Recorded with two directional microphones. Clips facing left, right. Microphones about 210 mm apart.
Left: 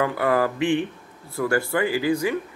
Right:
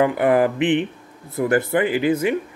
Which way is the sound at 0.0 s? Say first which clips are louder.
Right 5 dB; 20° right (ahead or behind).